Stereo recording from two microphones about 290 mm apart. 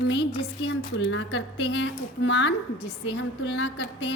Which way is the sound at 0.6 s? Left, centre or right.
Left.